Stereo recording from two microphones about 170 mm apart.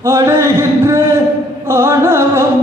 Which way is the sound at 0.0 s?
15° right (ahead or behind).